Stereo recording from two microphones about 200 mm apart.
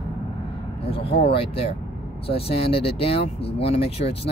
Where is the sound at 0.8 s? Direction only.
30° left (ahead or behind).